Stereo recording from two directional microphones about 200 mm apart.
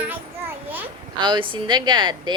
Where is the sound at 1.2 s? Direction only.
25° right (ahead or behind).